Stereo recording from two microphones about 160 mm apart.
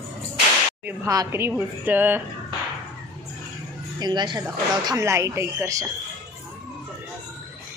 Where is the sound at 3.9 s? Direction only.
25° right (ahead or behind).